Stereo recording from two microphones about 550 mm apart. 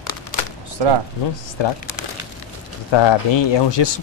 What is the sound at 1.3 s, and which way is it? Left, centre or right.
Speech, left.